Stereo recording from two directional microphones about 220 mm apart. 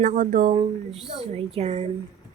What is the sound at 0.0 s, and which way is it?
Speech, 35° right (ahead or behind).